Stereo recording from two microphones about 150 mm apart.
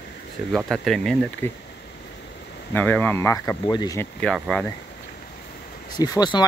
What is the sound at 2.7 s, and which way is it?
Speech, 10° left (ahead or behind).